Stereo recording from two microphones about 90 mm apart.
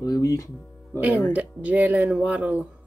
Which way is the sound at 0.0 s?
45° left (ahead or behind).